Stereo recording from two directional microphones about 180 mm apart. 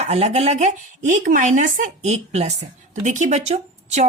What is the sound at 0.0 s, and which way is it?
A woman's voice, 35° right (ahead or behind).